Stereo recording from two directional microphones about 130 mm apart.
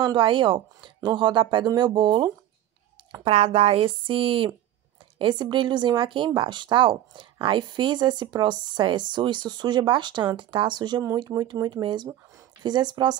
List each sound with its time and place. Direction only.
0.0 s speech: 40° right (ahead or behind)
3.3 s speech: 50° right (ahead or behind); by 13.1 s 35° right (ahead or behind)